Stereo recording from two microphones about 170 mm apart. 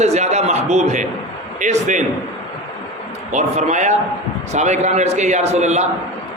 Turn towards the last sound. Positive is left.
turn(degrees=-40)  # may be behind; listen again after turning